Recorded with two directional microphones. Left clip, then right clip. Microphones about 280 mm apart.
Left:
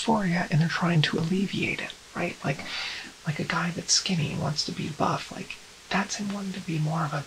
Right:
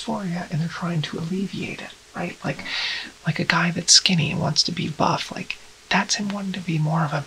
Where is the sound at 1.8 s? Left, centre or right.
Centre.